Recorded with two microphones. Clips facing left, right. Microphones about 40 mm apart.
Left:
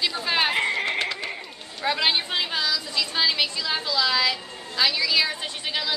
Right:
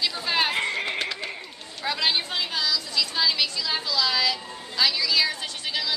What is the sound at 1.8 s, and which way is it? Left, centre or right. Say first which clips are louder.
A woman's voice: left 2 dB; centre.